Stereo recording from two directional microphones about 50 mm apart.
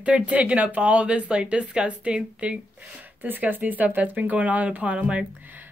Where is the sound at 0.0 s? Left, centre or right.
Right.